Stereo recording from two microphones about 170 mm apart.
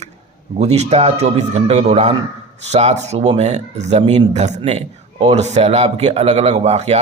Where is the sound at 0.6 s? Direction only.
40° right (ahead or behind).